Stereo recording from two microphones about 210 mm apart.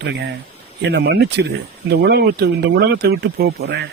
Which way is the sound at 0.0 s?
55° right (ahead or behind).